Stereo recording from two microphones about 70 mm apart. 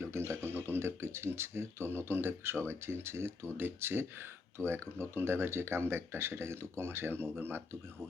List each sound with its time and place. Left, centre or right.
0.0 s speech: right